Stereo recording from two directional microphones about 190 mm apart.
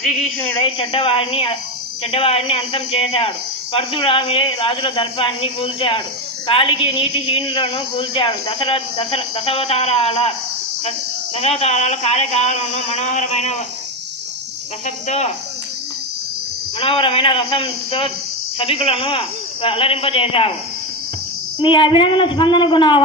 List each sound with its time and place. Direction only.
0.0 s a woman's voice: centre (ahead or behind)
0.6 s a woman's voice: 25° left (ahead or behind)
11.3 s speech: 35° left (ahead or behind)
14.8 s speech: 40° left (ahead or behind)
16.8 s a woman's voice: 30° left (ahead or behind)
21.6 s a woman's voice: 25° left (ahead or behind)